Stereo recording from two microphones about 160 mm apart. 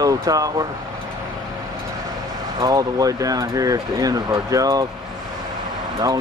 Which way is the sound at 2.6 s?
25° right (ahead or behind).